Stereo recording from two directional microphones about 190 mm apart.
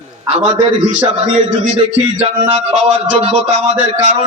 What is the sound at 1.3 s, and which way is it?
A man's voice, 30° right (ahead or behind).